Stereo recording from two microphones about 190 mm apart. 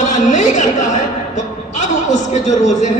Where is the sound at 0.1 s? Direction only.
40° left (ahead or behind).